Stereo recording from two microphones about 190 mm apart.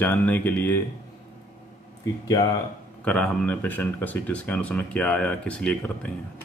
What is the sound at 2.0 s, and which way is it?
Speech, 20° left (ahead or behind).